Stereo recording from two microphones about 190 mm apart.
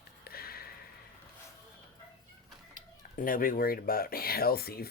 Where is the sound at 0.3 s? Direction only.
55° left (ahead or behind).